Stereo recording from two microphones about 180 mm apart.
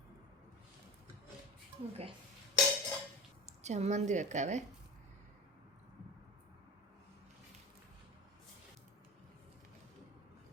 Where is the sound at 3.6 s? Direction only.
40° right (ahead or behind).